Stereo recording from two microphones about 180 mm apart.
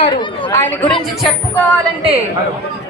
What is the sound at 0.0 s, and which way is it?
Chatter, 30° left (ahead or behind).